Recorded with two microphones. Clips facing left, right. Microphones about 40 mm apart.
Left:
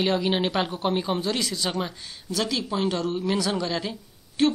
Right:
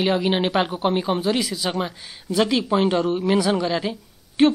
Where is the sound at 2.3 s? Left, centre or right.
Right.